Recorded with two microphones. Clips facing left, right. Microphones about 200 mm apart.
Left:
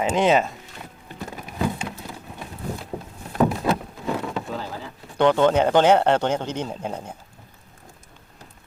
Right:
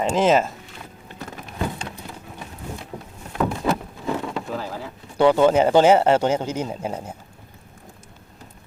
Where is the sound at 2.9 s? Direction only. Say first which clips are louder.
Left 3 dB; 30° left (ahead or behind).